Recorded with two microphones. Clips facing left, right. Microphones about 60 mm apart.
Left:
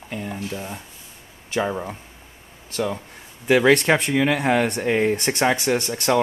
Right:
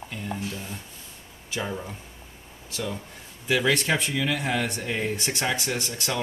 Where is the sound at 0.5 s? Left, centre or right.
Left.